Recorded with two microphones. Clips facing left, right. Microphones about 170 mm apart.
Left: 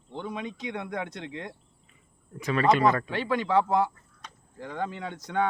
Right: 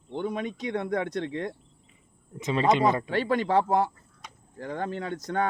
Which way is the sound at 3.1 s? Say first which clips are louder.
Right 2 dB; 40° right (ahead or behind).